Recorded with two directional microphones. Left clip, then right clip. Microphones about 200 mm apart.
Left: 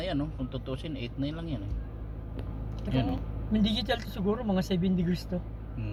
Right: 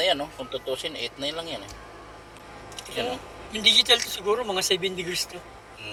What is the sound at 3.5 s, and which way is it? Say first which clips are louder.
A man's voice: right 12 dB; 20° left (ahead or behind).